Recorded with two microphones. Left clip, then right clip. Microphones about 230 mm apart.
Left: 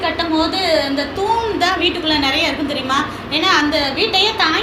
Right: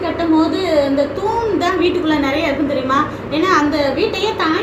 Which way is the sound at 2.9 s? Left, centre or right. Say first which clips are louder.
Right 1 dB; centre.